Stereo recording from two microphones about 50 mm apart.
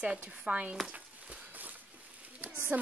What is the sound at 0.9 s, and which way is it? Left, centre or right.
Walk, right.